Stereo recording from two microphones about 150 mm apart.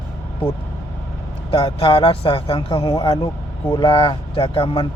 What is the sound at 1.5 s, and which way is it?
A man's voice, 35° left (ahead or behind).